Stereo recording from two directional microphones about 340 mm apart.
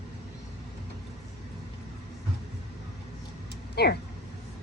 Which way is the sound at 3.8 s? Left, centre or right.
Left.